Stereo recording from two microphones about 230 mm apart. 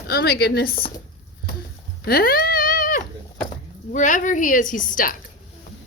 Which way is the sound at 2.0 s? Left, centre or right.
Left.